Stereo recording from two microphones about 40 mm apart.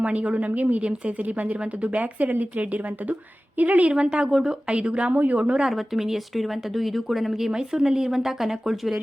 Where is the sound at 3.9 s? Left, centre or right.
Right.